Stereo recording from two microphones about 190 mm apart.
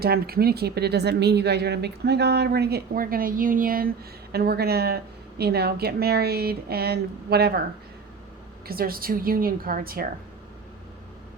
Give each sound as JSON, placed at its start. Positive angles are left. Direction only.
{"t": 0.0, "sound": "speech", "side_deg": -55}
{"t": 8.6, "sound": "a woman's voice", "side_deg": -50}